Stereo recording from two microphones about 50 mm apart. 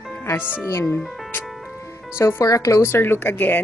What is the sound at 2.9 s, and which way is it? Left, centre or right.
Speech, left.